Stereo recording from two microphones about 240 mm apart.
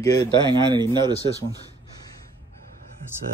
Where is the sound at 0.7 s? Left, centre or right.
Centre.